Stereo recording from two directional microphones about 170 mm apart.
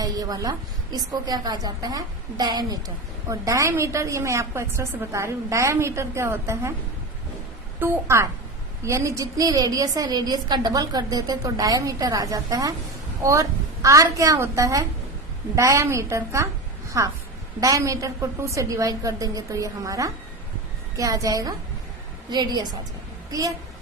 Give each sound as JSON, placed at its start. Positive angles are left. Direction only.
{"t": 0.0, "sound": "a woman's voice", "side_deg": -20}
{"t": 7.8, "sound": "a woman's voice", "side_deg": -15}